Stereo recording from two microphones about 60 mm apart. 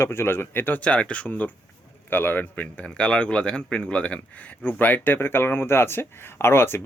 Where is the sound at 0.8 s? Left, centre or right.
Left.